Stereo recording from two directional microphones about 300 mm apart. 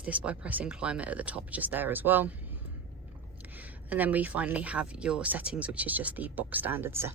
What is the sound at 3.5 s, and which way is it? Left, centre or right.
Speech, centre.